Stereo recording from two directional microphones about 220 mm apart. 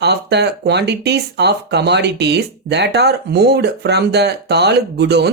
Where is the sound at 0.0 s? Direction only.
50° right (ahead or behind).